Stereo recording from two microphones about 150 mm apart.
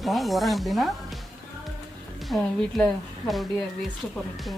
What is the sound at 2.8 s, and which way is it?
Speech, centre (ahead or behind).